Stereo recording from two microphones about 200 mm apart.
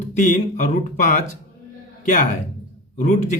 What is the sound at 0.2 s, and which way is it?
Speech, 40° left (ahead or behind).